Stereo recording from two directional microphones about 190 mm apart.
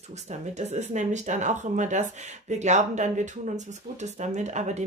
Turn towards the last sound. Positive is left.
turn(degrees=-35)  # may be behind; listen again after turning